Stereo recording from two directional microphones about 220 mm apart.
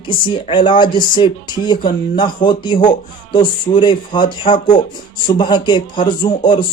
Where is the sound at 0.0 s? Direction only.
20° left (ahead or behind).